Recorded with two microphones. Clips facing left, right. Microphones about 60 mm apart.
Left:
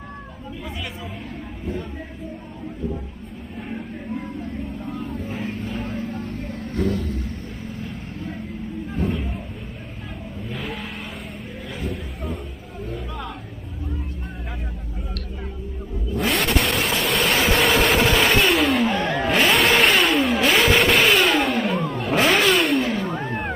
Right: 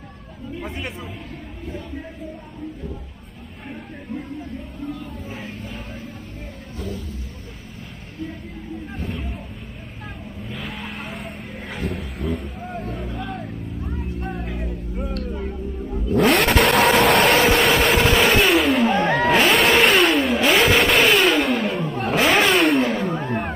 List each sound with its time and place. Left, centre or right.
5.6 s vehicle: centre
6.7 s vehicle: left
8.9 s a sound: centre
10.5 s vehicle: centre
11.8 s a sound: right
16.1 s vehicle: right
17.4 s vehicle: centre